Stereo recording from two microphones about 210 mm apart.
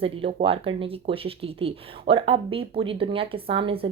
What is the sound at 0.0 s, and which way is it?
Speech, 30° right (ahead or behind).